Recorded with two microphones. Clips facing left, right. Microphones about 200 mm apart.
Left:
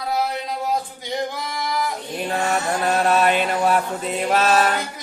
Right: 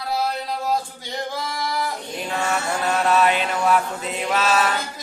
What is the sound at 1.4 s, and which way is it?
Singing, 20° left (ahead or behind).